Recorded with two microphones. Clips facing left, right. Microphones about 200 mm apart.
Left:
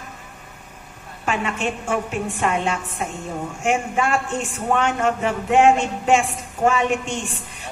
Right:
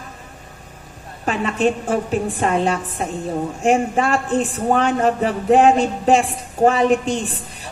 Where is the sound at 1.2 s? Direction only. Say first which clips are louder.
Right 5 dB; 35° right (ahead or behind).